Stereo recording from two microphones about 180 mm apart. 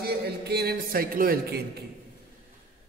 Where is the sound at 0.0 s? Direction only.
65° right (ahead or behind).